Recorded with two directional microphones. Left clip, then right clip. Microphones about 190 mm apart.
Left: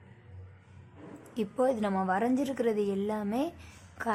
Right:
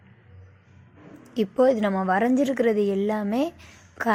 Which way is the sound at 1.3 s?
20° right (ahead or behind).